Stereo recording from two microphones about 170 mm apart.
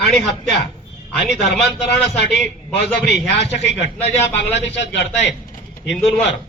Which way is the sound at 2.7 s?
80° left.